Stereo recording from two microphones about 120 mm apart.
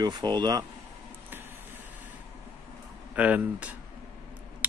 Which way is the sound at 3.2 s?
10° right (ahead or behind).